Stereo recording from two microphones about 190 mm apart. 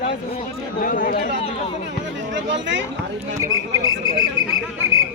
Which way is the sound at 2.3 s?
70° right (ahead or behind).